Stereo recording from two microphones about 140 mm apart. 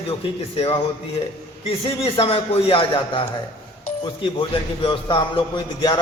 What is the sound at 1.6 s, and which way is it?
A man's voice, 40° left (ahead or behind).